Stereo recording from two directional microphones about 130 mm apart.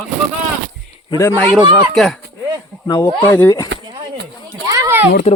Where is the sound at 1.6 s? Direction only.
35° right (ahead or behind).